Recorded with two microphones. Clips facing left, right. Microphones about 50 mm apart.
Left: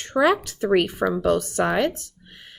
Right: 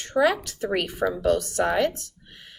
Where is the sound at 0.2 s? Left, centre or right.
Left.